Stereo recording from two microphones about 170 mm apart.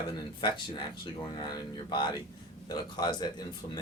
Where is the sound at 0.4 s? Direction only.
25° left (ahead or behind).